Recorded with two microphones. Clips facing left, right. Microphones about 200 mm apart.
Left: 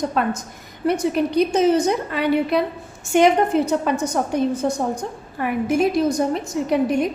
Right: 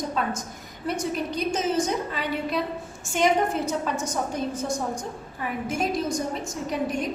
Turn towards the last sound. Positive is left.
turn(degrees=65)  # may be behind; listen again after turning